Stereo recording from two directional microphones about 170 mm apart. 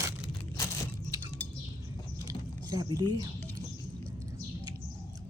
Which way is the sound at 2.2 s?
20° right (ahead or behind).